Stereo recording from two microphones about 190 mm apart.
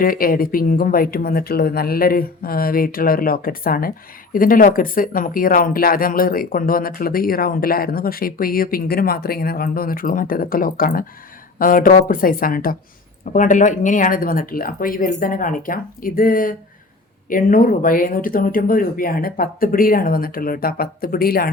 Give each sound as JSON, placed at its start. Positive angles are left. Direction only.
{"t": 0.0, "sound": "speech", "side_deg": 50}